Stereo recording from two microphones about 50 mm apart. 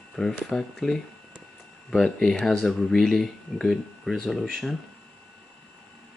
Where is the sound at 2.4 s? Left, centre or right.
Centre.